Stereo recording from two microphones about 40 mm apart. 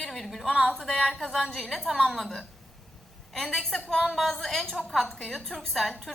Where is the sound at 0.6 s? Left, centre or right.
Centre.